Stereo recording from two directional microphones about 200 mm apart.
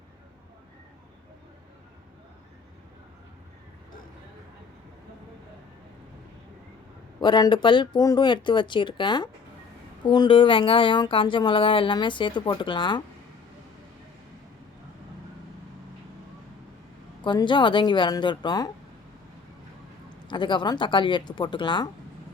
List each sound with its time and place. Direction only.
7.2 s speech: 20° left (ahead or behind)
17.2 s speech: 25° left (ahead or behind)
20.2 s speech: 25° left (ahead or behind)